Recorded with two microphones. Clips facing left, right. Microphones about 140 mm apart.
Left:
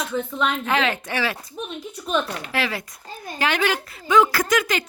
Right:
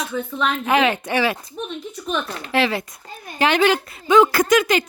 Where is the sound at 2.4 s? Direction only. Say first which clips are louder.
Right 6 dB; 25° right (ahead or behind).